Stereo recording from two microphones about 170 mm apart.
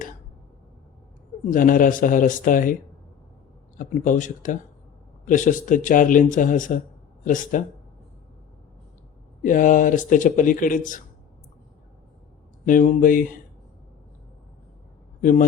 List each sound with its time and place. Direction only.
1.5 s speech: 55° left (ahead or behind)
3.8 s speech: 50° left (ahead or behind)
9.4 s speech: 50° left (ahead or behind)
12.6 s speech: 50° left (ahead or behind)
15.2 s a man's voice: 50° left (ahead or behind)